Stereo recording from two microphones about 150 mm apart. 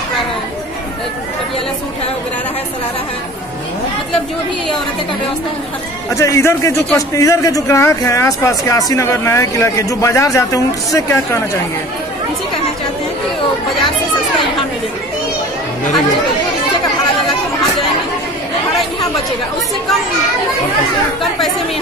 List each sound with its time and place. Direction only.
6.1 s speech: 20° left (ahead or behind)